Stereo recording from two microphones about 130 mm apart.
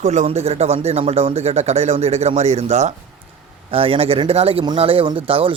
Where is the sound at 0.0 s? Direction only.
60° right (ahead or behind).